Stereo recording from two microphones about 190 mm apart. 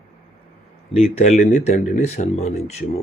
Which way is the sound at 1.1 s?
35° left (ahead or behind).